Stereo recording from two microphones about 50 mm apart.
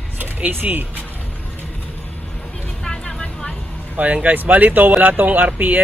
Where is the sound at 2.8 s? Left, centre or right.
Centre.